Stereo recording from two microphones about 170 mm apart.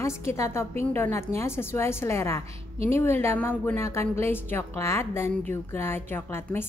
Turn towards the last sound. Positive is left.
turn(degrees=15)  # may be behind; listen again after turning